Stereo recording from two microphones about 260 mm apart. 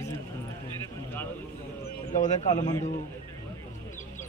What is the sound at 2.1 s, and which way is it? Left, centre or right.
Speech, left.